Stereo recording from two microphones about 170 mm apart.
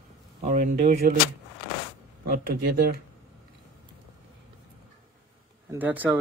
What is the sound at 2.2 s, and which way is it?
Speech, 60° right (ahead or behind).